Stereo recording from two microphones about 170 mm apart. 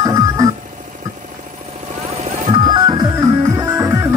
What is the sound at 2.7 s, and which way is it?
Music, 25° right (ahead or behind).